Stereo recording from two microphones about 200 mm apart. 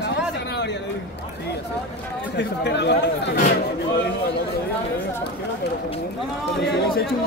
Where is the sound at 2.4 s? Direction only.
60° left (ahead or behind).